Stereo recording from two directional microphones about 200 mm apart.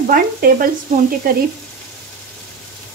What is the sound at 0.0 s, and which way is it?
Speech, 45° right (ahead or behind).